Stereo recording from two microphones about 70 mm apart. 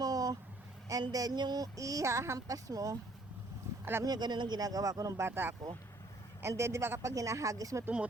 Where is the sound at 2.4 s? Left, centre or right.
Right.